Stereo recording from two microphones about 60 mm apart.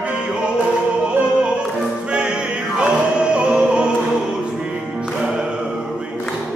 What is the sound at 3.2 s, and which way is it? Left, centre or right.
Music, centre.